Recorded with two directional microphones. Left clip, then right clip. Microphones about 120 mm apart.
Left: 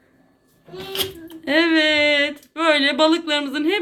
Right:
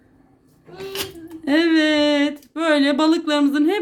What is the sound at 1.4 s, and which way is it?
Speech, 80° right.